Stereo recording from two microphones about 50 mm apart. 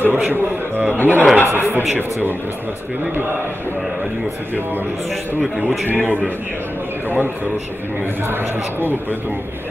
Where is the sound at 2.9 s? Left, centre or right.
Right.